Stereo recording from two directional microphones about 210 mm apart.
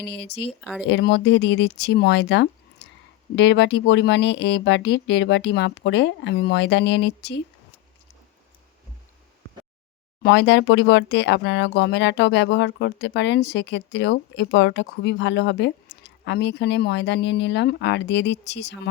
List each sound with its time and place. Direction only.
0.0 s speech: 55° left (ahead or behind)
0.6 s speech: centre (ahead or behind)
0.9 s speech: 55° left (ahead or behind)
10.2 s speech: 55° left (ahead or behind)